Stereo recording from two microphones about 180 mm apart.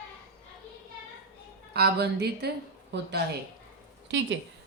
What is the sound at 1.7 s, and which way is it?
Speech, 60° right (ahead or behind).